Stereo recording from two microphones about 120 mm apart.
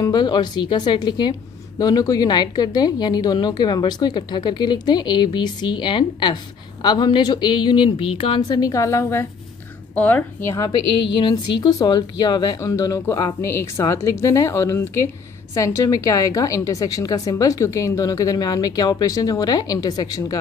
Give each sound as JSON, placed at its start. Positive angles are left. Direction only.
{"t": 0.0, "sound": "a woman's voice", "side_deg": 40}
{"t": 8.5, "sound": "a woman's voice", "side_deg": 30}
{"t": 11.0, "sound": "a woman's voice", "side_deg": 45}